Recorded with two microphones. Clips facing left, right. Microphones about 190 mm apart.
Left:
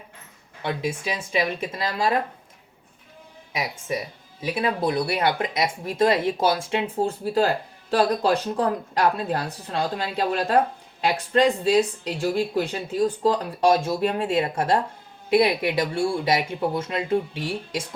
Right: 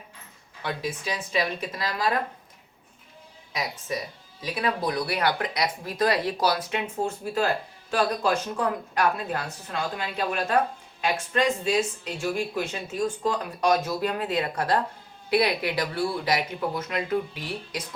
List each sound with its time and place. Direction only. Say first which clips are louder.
0.6 s speech: left 4 dB; 25° left (ahead or behind)
4.5 s speech: left 3 dB; 25° left (ahead or behind)